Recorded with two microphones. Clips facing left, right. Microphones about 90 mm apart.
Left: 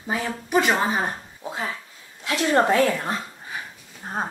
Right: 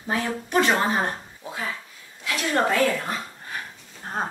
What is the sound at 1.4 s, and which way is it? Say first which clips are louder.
A woman's voice: left 2 dB; 25° left (ahead or behind).